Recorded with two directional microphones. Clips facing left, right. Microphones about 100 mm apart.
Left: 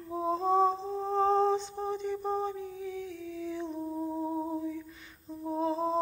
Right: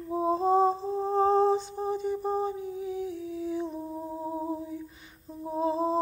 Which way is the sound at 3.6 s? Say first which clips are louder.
Even; 5° right (ahead or behind).